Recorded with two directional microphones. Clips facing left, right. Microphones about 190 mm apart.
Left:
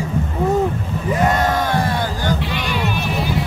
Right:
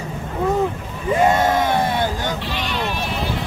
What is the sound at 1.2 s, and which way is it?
Yell, 25° right (ahead or behind).